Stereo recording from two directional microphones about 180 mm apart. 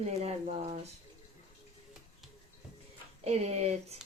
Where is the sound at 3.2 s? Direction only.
35° right (ahead or behind).